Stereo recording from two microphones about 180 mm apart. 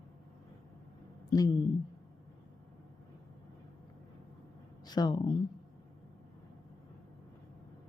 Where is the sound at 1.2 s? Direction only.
20° left (ahead or behind).